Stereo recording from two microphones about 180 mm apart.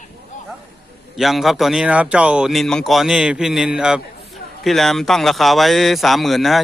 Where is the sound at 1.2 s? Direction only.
Centre (ahead or behind).